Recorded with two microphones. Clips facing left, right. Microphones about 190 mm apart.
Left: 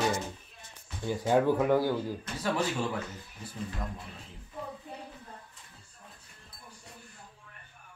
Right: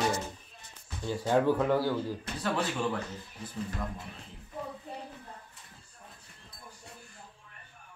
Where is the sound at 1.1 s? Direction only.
15° left (ahead or behind).